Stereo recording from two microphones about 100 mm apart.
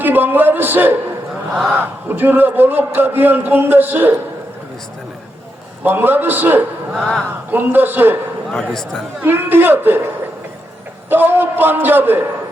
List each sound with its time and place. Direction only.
0.0 s a man's voice: 20° right (ahead or behind)
5.8 s a man's voice: 20° right (ahead or behind)
7.0 s speech: centre (ahead or behind)
7.5 s a man's voice: 20° right (ahead or behind)
8.7 s speech: 5° left (ahead or behind)
9.2 s a man's voice: 20° right (ahead or behind)
11.1 s a man's voice: 20° right (ahead or behind)